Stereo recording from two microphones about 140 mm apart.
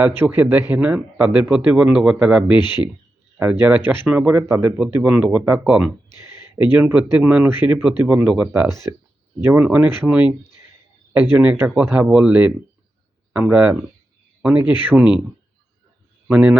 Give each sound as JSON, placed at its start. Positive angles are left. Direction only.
{"t": 0.2, "sound": "speech", "side_deg": -15}
{"t": 2.6, "sound": "speech", "side_deg": 30}
{"t": 3.3, "sound": "speech", "side_deg": -15}
{"t": 8.9, "sound": "speech", "side_deg": -20}
{"t": 14.8, "sound": "speech", "side_deg": -10}
{"t": 16.3, "sound": "speech", "side_deg": -10}